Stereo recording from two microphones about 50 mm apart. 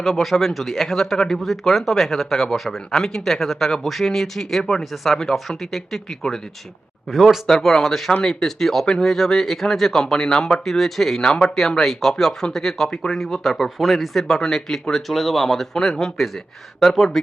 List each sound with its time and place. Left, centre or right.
0.0 s speech: centre
7.1 s speech: centre
11.2 s speech: centre
11.8 s speech: centre